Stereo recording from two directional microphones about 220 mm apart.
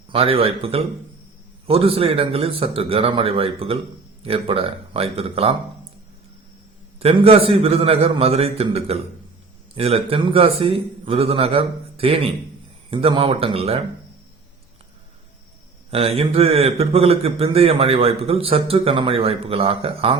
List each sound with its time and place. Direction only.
0.1 s a man's voice: 25° right (ahead or behind)
7.0 s a man's voice: 25° right (ahead or behind)
15.9 s a man's voice: 25° right (ahead or behind)